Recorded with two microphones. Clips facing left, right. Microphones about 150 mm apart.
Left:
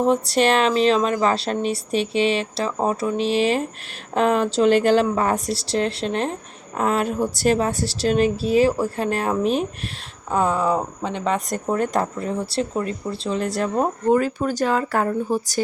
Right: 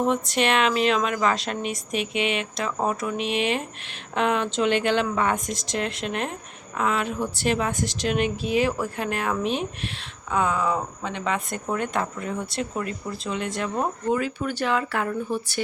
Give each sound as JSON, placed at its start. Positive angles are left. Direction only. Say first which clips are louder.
{"t": 0.0, "sound": "speech", "louder": "left 5 dB", "side_deg": 35}